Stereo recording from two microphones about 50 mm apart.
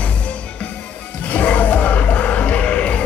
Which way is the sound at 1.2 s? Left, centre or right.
Left.